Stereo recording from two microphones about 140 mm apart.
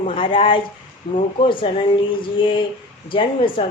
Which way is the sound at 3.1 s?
40° left (ahead or behind).